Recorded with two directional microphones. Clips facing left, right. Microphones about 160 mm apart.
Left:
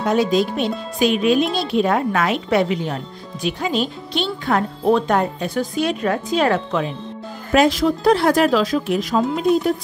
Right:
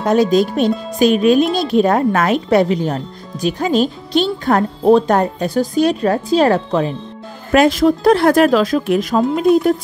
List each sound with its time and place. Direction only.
0.0 s speech: 40° right (ahead or behind)
7.5 s speech: 50° right (ahead or behind)